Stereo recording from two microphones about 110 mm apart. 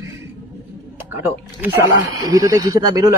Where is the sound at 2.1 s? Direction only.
30° right (ahead or behind).